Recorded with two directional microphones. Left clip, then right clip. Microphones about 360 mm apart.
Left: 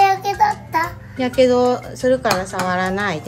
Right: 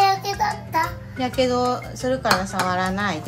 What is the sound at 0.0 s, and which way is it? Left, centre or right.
Child singing, centre.